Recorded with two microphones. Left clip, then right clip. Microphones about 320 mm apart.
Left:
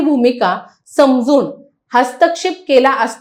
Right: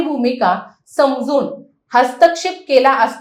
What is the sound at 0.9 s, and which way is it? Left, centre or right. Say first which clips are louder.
A woman's voice: left 3 dB; left.